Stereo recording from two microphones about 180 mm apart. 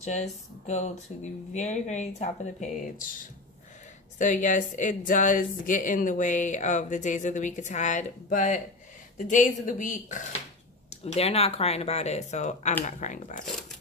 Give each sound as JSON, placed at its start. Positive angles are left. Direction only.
{"t": 0.0, "sound": "speech", "side_deg": 40}
{"t": 4.2, "sound": "speech", "side_deg": 45}
{"t": 13.5, "sound": "zipper", "side_deg": 0}